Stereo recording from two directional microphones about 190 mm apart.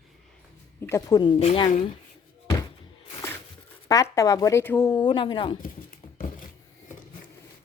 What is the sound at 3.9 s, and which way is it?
Speech, 20° left (ahead or behind).